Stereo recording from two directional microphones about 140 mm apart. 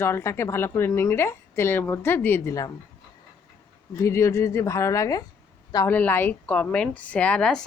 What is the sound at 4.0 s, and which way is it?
Speech, 20° left (ahead or behind).